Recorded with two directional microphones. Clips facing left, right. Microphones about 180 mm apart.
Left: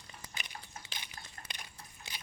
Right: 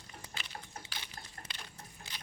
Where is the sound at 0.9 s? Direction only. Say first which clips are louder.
Right 1 dB; 15° left (ahead or behind).